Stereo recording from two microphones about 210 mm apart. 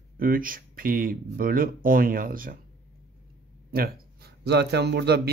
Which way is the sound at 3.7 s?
45° right (ahead or behind).